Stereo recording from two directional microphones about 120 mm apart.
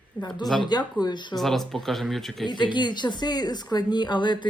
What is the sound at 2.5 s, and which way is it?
Speech, 40° left (ahead or behind).